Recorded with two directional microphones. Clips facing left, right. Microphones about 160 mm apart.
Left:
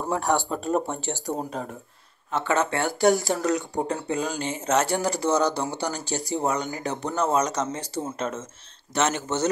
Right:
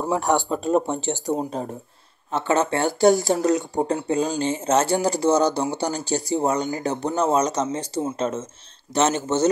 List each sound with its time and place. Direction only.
0.2 s speech: 20° right (ahead or behind)